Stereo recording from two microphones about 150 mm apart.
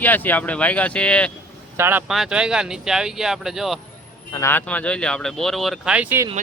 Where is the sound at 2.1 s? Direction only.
5° right (ahead or behind).